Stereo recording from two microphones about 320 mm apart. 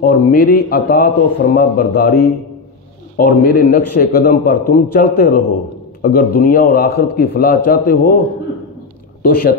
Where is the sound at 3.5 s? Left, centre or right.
Left.